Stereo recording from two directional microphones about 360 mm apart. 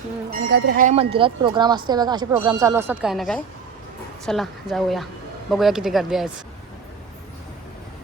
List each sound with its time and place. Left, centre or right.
0.3 s speech: right; by 6.2 s centre